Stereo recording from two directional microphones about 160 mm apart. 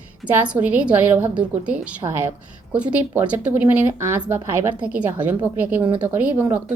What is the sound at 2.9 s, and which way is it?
A woman's voice, 10° right (ahead or behind).